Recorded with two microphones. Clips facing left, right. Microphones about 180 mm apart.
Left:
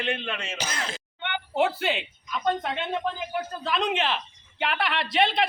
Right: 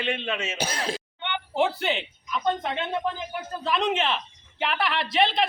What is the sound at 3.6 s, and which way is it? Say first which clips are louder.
A man's voice: right 2 dB; centre (ahead or behind).